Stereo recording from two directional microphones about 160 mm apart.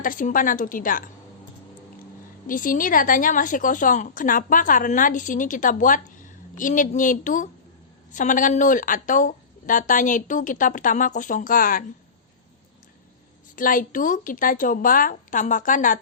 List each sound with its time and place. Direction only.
0.0 s a woman's voice: 60° left (ahead or behind)
2.5 s a woman's voice: 60° left (ahead or behind)
13.6 s a woman's voice: 60° left (ahead or behind)